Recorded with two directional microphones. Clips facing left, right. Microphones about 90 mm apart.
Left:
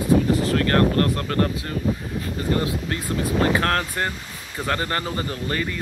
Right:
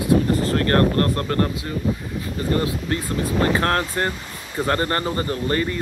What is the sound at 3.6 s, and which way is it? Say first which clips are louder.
Speech: right 2 dB; 20° right (ahead or behind).